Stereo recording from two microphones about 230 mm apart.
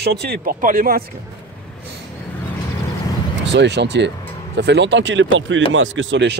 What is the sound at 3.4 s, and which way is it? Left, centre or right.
Speech, right.